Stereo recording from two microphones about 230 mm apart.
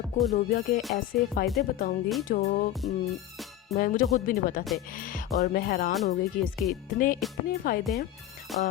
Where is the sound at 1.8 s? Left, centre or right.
Left.